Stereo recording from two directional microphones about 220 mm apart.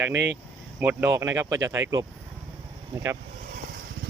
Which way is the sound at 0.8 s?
10° right (ahead or behind).